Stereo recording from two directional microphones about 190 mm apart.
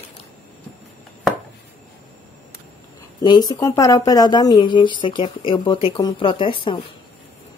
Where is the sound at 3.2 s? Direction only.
20° left (ahead or behind).